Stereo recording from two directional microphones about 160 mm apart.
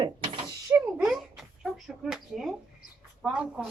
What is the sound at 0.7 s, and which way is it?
A child's voice, 10° right (ahead or behind).